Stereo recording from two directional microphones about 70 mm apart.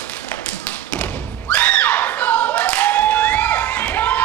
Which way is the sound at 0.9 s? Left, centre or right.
Centre.